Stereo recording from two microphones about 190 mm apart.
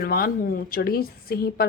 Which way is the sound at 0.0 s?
50° left (ahead or behind).